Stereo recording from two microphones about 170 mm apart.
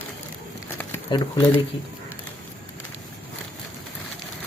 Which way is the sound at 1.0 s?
25° left (ahead or behind).